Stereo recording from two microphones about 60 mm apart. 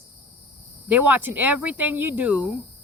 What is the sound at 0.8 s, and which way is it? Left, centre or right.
Speech, right.